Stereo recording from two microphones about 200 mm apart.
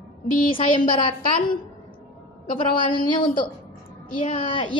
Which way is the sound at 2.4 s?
25° left (ahead or behind).